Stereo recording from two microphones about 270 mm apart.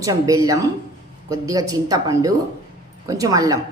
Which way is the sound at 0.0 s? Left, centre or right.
Centre.